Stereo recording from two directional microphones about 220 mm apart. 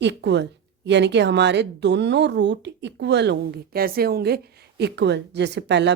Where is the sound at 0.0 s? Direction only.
50° right (ahead or behind).